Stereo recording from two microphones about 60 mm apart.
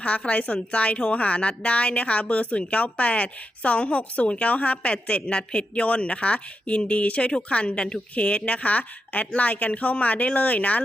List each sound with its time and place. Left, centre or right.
0.3 s a woman's voice: left